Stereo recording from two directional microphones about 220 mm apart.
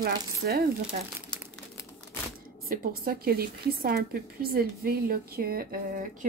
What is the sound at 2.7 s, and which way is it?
Speech, 40° right (ahead or behind).